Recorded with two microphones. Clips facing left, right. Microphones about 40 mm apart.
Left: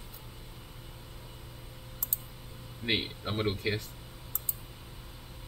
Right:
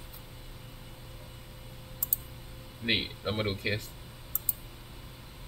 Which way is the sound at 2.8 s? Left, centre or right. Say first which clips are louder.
Right 1 dB; centre.